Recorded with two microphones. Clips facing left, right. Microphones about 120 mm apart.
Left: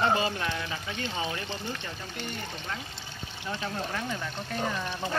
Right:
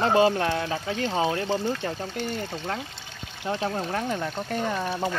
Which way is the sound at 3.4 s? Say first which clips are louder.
Right 6 dB; 45° right (ahead or behind).